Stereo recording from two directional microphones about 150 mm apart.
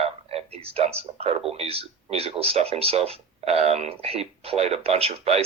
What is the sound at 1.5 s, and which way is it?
Speech, 40° right (ahead or behind).